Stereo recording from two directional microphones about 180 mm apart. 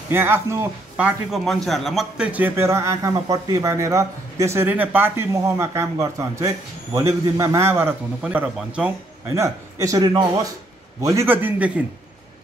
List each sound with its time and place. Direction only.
0.1 s a man's voice: 15° right (ahead or behind)
9.3 s a man's voice: 15° right (ahead or behind)